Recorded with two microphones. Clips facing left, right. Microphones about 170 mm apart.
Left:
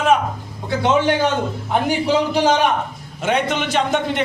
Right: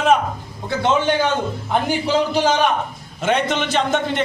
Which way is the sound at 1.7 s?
10° left (ahead or behind).